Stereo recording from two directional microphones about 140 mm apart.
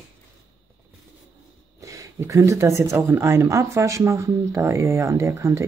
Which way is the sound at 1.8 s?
25° right (ahead or behind).